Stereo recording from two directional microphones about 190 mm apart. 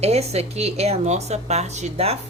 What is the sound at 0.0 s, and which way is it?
A woman's voice, 35° right (ahead or behind).